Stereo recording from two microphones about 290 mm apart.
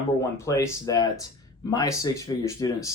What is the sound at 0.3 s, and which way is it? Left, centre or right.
Speech, centre.